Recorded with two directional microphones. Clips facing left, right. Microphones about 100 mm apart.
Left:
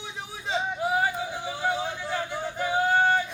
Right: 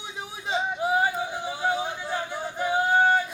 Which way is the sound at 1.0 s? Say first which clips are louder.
Right 2 dB; 15° right (ahead or behind).